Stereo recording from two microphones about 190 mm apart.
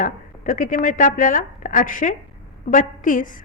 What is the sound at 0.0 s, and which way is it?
A woman's voice, 45° left (ahead or behind).